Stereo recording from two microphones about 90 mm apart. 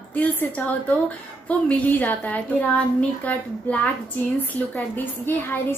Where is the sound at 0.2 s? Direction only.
15° left (ahead or behind).